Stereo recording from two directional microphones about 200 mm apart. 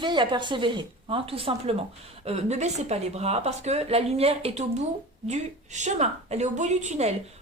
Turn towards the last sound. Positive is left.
turn(degrees=-35)  # may be behind; listen again after turning